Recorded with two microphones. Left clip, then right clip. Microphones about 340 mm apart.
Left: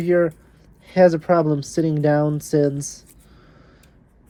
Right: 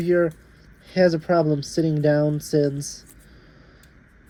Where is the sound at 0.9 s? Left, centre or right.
Centre.